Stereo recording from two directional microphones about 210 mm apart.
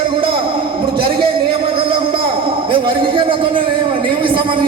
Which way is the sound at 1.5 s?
25° right (ahead or behind).